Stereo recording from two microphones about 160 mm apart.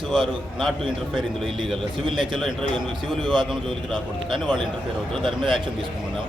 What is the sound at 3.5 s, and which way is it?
A man's voice, centre (ahead or behind).